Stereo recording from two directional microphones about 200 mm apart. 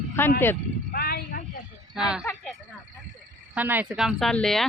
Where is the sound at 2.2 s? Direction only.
5° left (ahead or behind).